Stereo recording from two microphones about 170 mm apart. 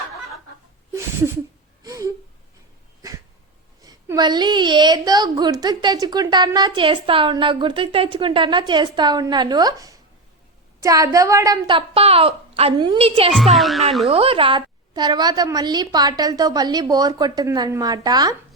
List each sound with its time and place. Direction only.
1.8 s gasp: 20° right (ahead or behind)
3.8 s a woman's voice: 25° right (ahead or behind)
11.9 s a child's voice: 35° right (ahead or behind)
13.3 s speech: centre (ahead or behind)
14.1 s a woman's voice: 35° right (ahead or behind)